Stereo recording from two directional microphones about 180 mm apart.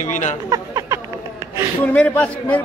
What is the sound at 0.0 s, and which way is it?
Speech, 40° left (ahead or behind).